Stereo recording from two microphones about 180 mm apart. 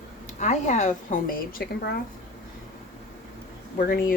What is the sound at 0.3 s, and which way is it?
Speech, 40° left (ahead or behind).